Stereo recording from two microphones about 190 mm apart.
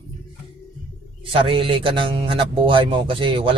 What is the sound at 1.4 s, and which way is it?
Speech, 25° right (ahead or behind).